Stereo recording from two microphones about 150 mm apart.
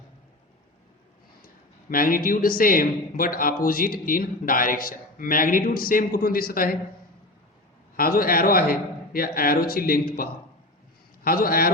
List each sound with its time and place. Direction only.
1.9 s a man's voice: 70° left (ahead or behind)
7.9 s a man's voice: 75° left (ahead or behind)